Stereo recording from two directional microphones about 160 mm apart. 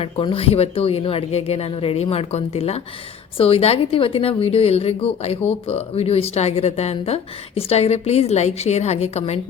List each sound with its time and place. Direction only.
0.0 s a woman's voice: 35° left (ahead or behind)